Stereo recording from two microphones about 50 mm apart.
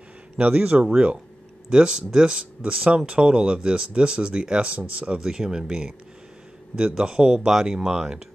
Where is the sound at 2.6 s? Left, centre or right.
Right.